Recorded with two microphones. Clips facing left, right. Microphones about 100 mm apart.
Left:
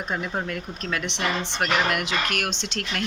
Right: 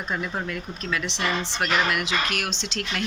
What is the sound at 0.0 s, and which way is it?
Speech, 50° left (ahead or behind).